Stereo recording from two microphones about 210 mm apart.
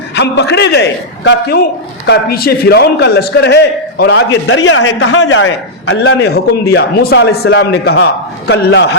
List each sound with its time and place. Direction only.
0.2 s a man's voice: 55° left (ahead or behind)
4.4 s a man's voice: 65° left (ahead or behind)